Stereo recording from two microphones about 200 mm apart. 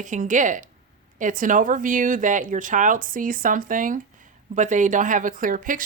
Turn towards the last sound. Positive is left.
turn(degrees=-40)  # may be behind; listen again after turning